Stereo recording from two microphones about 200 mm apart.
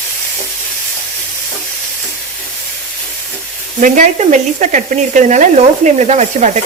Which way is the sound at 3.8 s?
35° right (ahead or behind).